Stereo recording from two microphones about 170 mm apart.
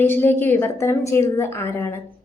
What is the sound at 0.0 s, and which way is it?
A woman's voice, 10° left (ahead or behind).